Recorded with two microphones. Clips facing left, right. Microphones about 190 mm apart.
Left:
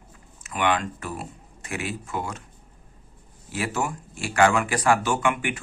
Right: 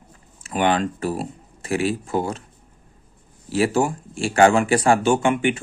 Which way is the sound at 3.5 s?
30° right (ahead or behind).